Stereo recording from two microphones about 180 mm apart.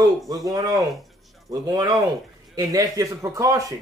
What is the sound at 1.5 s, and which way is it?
A man's voice, 20° right (ahead or behind).